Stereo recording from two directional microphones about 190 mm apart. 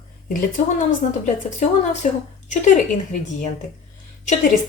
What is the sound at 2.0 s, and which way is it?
A woman's voice, 40° left (ahead or behind).